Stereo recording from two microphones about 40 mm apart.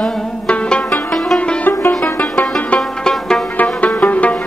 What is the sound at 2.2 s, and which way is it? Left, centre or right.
Music, centre.